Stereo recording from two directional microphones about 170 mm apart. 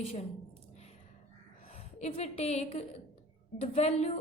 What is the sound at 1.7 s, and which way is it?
A woman's voice, 35° left (ahead or behind).